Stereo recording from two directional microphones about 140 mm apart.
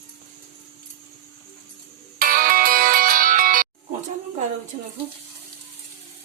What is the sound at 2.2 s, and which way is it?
Music, 90° right.